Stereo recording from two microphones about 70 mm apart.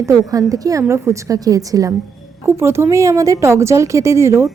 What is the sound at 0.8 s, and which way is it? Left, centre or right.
A woman's voice, right.